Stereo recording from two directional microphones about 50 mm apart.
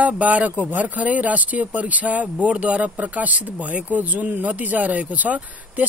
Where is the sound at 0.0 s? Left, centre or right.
Right.